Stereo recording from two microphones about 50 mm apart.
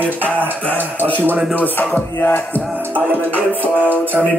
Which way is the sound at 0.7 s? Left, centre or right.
Right.